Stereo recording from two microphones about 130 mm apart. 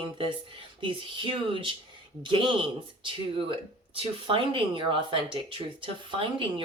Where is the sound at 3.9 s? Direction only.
45° right (ahead or behind).